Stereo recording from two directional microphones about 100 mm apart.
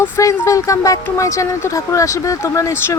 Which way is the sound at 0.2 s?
30° left (ahead or behind).